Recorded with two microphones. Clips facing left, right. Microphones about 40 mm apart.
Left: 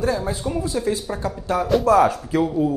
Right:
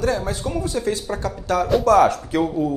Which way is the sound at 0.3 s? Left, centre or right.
Right.